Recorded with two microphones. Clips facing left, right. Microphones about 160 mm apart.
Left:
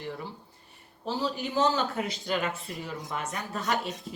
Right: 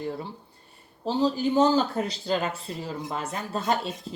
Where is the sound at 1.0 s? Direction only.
30° right (ahead or behind).